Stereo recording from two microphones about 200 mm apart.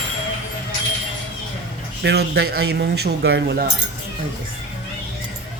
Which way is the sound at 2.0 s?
55° right (ahead or behind).